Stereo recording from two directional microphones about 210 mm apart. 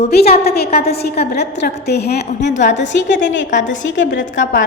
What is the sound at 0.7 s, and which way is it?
Speech, 30° left (ahead or behind).